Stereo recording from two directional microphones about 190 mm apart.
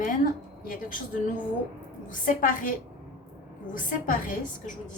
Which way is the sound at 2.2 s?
45° left (ahead or behind).